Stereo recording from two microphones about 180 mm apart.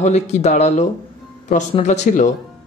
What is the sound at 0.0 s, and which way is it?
Speech, 40° left (ahead or behind).